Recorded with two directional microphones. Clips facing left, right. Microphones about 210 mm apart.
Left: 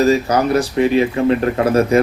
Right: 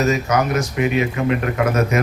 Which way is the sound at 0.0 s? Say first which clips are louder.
Left 4 dB; 30° left (ahead or behind).